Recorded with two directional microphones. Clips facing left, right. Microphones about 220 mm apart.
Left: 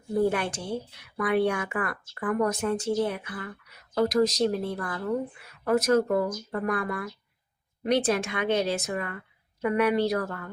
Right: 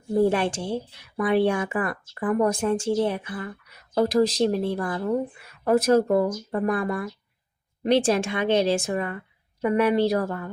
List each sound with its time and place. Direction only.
0.3 s a woman's voice: 25° right (ahead or behind)